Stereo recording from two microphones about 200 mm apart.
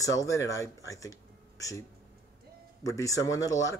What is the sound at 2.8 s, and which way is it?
Speech, 15° left (ahead or behind).